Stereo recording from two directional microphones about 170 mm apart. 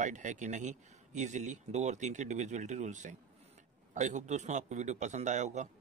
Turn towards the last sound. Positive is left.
turn(degrees=-45)  # may be behind; listen again after turning